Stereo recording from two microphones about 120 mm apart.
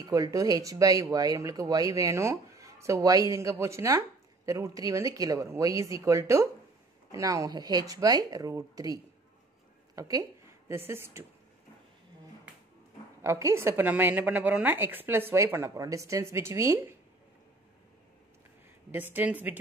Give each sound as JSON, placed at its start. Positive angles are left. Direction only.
{"t": 0.0, "sound": "speech", "side_deg": -30}
{"t": 13.2, "sound": "speech", "side_deg": -25}
{"t": 18.9, "sound": "speech", "side_deg": -15}